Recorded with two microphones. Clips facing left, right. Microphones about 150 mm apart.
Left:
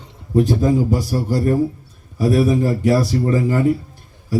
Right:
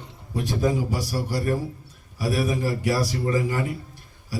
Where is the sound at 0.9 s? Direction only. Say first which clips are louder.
Left 8 dB; 45° left (ahead or behind).